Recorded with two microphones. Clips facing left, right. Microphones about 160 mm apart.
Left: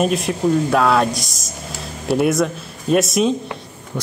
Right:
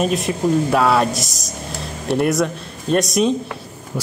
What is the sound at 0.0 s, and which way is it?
Speech, centre (ahead or behind).